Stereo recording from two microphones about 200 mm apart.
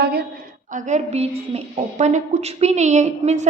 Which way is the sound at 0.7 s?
35° right (ahead or behind).